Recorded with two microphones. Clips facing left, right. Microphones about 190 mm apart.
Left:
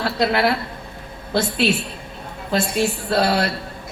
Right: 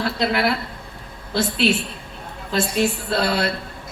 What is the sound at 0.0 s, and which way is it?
A woman's voice, 50° left (ahead or behind).